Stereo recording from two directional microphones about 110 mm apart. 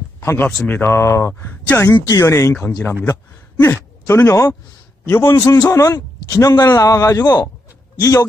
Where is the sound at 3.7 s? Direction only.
20° left (ahead or behind).